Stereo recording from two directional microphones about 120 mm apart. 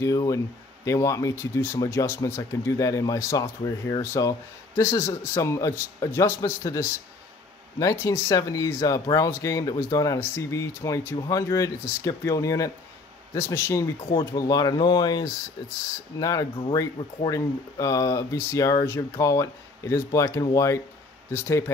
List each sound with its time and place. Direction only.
0.0 s a man's voice: 30° left (ahead or behind)